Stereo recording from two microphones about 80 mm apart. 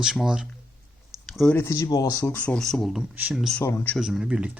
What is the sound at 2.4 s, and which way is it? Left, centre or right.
Speech, centre.